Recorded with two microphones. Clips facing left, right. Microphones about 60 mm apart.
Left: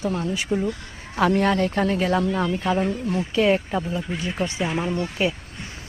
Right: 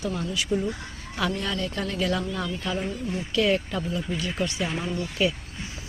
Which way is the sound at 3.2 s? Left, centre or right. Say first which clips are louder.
Left 3 dB; left.